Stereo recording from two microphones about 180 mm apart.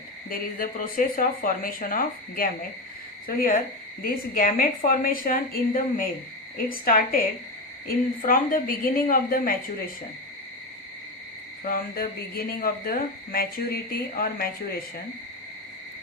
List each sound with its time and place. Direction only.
0.3 s a woman's voice: 50° left (ahead or behind)
11.6 s speech: 55° left (ahead or behind)